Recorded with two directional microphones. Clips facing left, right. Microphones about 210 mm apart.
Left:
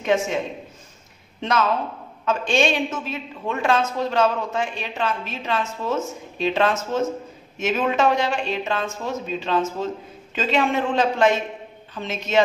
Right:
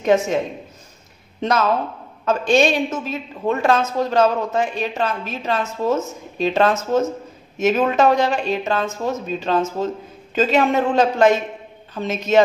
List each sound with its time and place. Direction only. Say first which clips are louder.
0.0 s a woman's voice: right 4 dB; 40° right (ahead or behind)
1.4 s a woman's voice: right 3 dB; 40° right (ahead or behind)